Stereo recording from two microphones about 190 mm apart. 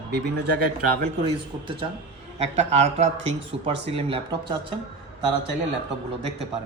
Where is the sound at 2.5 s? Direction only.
35° right (ahead or behind).